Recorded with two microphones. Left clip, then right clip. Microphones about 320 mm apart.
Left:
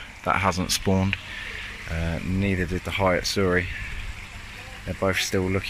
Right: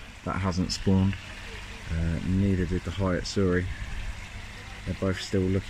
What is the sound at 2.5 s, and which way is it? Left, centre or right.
Speech, left.